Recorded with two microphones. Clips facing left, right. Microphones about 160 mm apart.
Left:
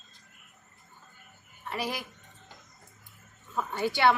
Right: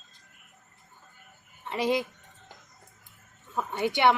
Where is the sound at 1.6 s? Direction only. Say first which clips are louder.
Right 7 dB; 20° right (ahead or behind).